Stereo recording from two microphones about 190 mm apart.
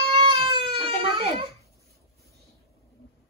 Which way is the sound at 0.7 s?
30° right (ahead or behind).